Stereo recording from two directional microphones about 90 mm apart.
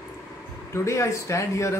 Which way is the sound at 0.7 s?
35° left (ahead or behind).